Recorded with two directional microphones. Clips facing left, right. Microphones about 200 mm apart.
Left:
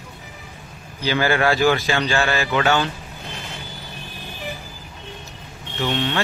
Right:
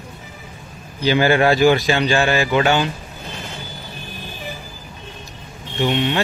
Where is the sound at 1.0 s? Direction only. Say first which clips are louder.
Right 4 dB; 20° right (ahead or behind).